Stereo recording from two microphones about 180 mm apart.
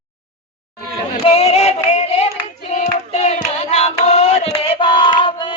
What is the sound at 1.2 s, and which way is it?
Female singing, 35° left (ahead or behind).